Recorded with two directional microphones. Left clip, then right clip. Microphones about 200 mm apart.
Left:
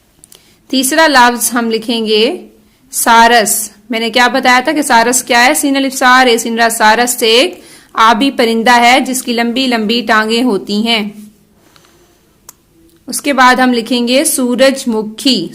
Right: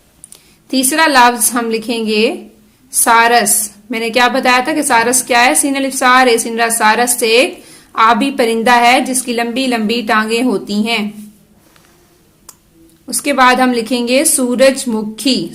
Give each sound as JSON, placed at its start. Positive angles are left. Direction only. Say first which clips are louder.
{"t": 0.3, "sound": "a woman's voice", "louder": "left 2 dB", "side_deg": 25}
{"t": 13.1, "sound": "a woman's voice", "louder": "left 2 dB", "side_deg": 25}